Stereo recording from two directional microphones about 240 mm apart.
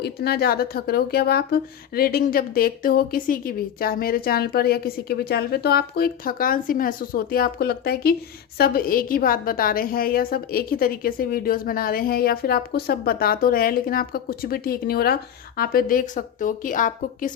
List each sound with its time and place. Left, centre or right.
0.0 s a woman's voice: left